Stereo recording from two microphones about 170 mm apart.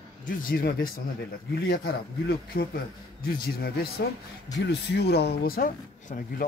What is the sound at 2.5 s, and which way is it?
Speech, 60° left (ahead or behind).